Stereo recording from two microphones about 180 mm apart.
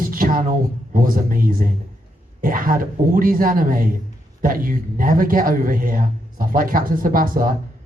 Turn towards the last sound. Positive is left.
turn(degrees=-50)  # may be behind; listen again after turning